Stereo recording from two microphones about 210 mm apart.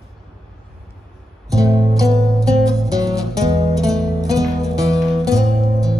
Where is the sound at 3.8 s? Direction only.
Centre (ahead or behind).